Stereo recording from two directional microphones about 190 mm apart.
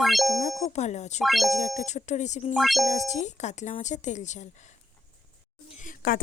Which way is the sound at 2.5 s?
Centre (ahead or behind).